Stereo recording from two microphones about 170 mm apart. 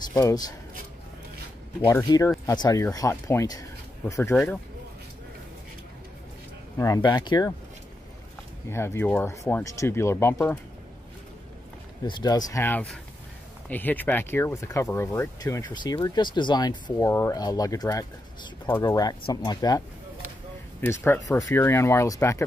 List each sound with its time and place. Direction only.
0.1 s speech: 20° left (ahead or behind)
1.9 s speech: 20° left (ahead or behind)
6.8 s speech: 20° left (ahead or behind)
8.6 s speech: 15° left (ahead or behind)
12.0 s speech: 25° left (ahead or behind)
20.8 s speech: 10° left (ahead or behind)